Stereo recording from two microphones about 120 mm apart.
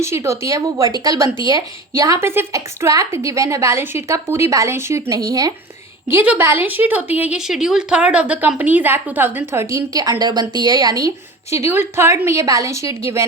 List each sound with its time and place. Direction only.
0.0 s speech: 25° right (ahead or behind)
6.1 s speech: 15° right (ahead or behind); by 11.1 s 30° right (ahead or behind)
11.5 s speech: 20° right (ahead or behind)